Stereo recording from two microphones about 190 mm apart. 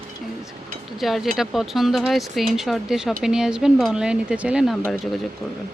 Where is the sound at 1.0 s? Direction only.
Centre (ahead or behind).